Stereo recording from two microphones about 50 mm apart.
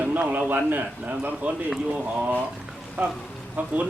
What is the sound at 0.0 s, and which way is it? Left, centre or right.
A man's voice, right.